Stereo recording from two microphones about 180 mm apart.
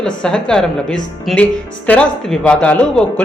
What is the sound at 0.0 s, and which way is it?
A woman's voice, 5° left (ahead or behind).